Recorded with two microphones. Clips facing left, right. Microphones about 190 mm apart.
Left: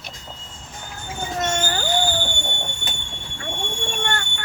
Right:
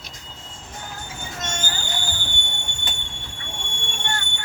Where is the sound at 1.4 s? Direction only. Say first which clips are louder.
Left 8 dB; 60° left (ahead or behind).